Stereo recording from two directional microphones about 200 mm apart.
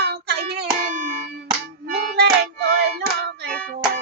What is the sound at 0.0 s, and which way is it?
Hands, 55° right (ahead or behind).